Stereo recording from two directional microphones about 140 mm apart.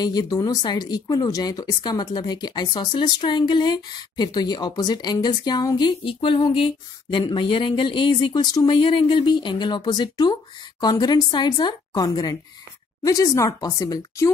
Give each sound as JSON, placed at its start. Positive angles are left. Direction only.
{"t": 0.0, "sound": "speech", "side_deg": 30}
{"t": 5.9, "sound": "a sound", "side_deg": 40}
{"t": 10.8, "sound": "speech", "side_deg": 30}